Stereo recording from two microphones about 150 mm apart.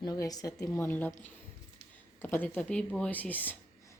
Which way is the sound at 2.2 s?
15° left (ahead or behind).